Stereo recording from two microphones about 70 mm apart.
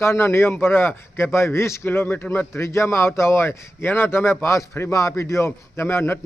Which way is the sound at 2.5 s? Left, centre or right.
Left.